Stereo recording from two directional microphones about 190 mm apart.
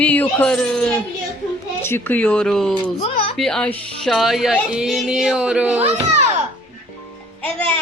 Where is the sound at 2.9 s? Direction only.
35° left (ahead or behind).